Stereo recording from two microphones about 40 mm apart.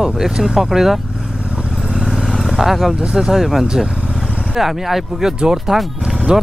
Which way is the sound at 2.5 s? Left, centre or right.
Centre.